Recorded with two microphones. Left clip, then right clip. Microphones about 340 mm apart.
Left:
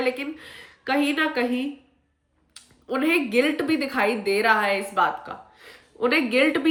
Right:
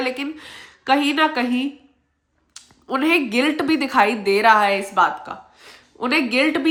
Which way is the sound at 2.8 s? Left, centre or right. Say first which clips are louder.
Right 4 dB; centre.